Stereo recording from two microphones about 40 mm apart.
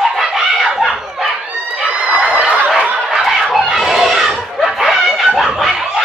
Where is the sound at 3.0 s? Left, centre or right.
Centre.